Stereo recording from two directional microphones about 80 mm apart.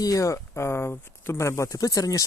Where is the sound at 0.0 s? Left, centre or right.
Left.